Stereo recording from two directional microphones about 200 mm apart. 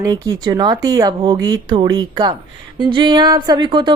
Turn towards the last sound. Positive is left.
turn(degrees=-25)  # may be behind; listen again after turning